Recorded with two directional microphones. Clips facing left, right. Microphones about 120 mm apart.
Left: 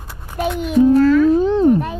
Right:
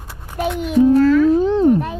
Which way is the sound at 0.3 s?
20° left (ahead or behind).